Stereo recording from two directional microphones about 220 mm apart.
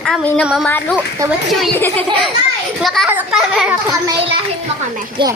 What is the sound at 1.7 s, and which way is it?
Speech, 10° left (ahead or behind).